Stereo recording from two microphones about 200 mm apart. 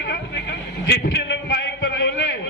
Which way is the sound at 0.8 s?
60° left (ahead or behind).